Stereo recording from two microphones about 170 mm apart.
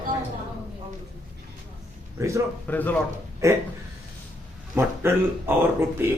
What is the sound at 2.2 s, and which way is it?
Speech, 15° right (ahead or behind).